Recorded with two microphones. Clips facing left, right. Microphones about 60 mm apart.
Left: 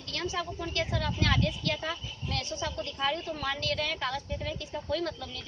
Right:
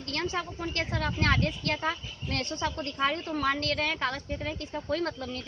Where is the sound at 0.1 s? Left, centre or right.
Right.